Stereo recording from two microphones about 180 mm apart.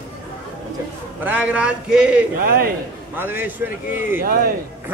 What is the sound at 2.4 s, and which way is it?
Speech, 55° right (ahead or behind).